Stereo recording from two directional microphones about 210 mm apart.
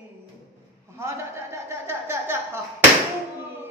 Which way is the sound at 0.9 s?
15° right (ahead or behind).